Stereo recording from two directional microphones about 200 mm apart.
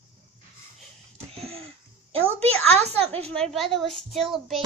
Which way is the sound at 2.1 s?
30° right (ahead or behind).